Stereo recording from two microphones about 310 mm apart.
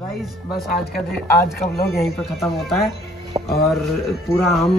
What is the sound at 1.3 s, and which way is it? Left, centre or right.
Speech, left.